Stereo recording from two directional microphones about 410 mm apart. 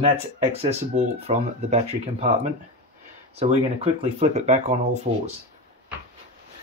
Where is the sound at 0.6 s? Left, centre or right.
Centre.